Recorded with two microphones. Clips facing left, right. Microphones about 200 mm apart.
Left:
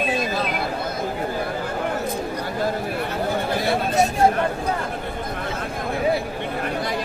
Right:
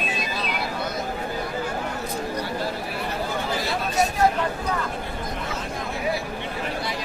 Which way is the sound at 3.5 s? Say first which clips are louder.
Left 5 dB; 55° left (ahead or behind).